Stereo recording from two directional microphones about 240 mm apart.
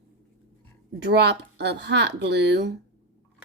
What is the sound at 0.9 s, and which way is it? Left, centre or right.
Speech, right.